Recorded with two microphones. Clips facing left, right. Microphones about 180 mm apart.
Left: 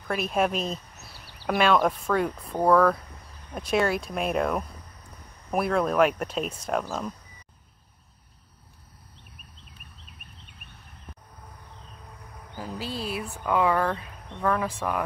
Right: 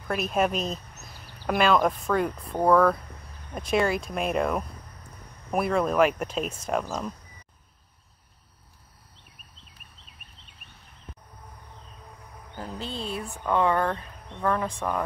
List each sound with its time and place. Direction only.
0.1 s speech: centre (ahead or behind)
12.5 s a sound: 5° left (ahead or behind)
14.4 s speech: 5° left (ahead or behind)